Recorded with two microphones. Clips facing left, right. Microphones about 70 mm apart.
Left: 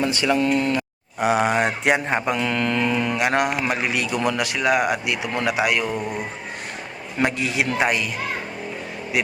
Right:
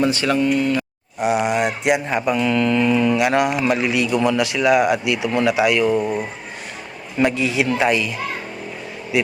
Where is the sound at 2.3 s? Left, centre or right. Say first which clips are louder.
Right 4 dB; left.